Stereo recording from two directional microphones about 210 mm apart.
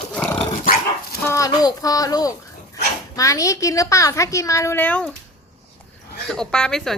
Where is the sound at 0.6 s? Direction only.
40° left (ahead or behind).